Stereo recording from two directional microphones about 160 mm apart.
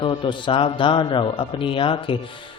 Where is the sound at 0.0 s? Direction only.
30° left (ahead or behind).